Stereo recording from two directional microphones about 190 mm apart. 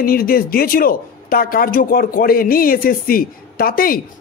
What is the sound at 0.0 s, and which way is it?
A man's voice, 50° left (ahead or behind).